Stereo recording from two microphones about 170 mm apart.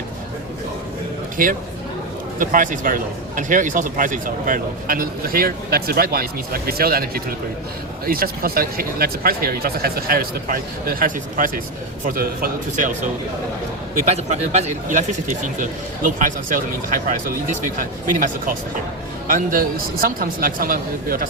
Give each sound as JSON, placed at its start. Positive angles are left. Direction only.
{"t": 1.4, "sound": "a man's voice", "side_deg": -55}
{"t": 13.9, "sound": "speech", "side_deg": -40}
{"t": 19.3, "sound": "a man's voice", "side_deg": -55}